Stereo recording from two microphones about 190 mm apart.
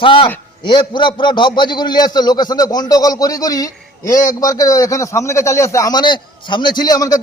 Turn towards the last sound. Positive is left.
turn(degrees=20)  # may be behind; listen again after turning